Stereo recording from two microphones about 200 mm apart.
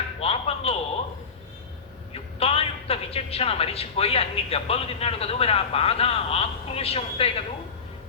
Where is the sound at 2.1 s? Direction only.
30° left (ahead or behind).